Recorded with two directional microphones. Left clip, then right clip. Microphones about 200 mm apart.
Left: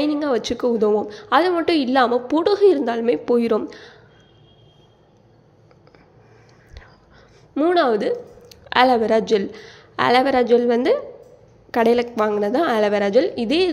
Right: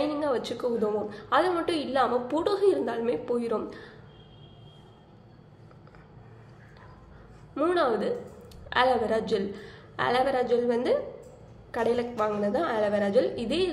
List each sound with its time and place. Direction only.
0.0 s a woman's voice: 35° left (ahead or behind)
7.5 s a woman's voice: 35° left (ahead or behind)